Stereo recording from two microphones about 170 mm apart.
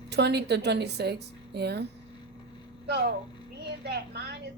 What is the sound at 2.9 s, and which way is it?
A woman's voice, 70° right (ahead or behind).